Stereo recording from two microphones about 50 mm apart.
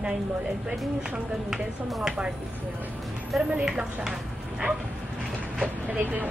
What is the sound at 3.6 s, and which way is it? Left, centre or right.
Speech, centre.